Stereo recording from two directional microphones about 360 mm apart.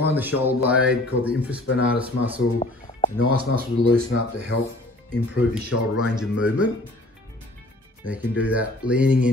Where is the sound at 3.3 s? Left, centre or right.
Right.